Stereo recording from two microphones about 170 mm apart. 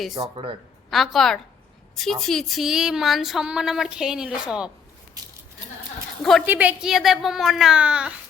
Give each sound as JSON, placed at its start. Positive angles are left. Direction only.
{"t": 0.1, "sound": "speech", "side_deg": -25}
{"t": 0.9, "sound": "speech", "side_deg": 0}
{"t": 5.2, "sound": "sheep", "side_deg": -20}
{"t": 6.4, "sound": "speech", "side_deg": -10}